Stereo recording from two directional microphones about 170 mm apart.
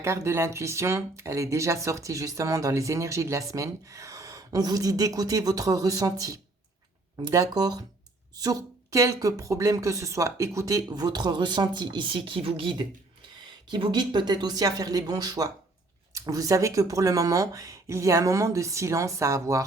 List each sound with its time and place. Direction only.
0.0 s speech: 15° right (ahead or behind)